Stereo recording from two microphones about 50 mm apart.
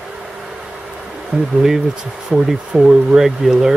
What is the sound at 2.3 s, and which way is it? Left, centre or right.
Speech, centre.